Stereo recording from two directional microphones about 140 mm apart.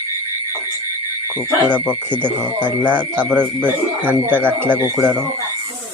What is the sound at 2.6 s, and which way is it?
Speech, 10° right (ahead or behind).